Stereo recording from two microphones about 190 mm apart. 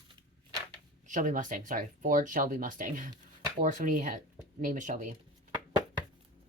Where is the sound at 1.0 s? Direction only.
45° right (ahead or behind).